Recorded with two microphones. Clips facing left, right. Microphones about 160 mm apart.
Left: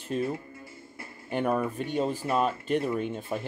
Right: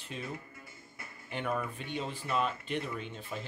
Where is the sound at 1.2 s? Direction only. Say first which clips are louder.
Left 8 dB; 45° left (ahead or behind).